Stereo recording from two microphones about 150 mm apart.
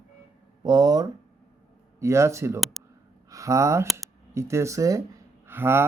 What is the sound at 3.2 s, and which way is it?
Speech, 20° right (ahead or behind).